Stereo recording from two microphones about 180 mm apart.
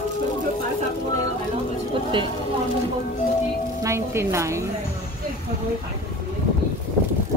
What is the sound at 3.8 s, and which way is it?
Speech, 15° right (ahead or behind).